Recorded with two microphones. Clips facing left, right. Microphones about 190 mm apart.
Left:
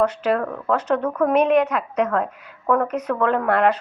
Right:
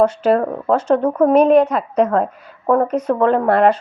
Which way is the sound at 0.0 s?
30° right (ahead or behind).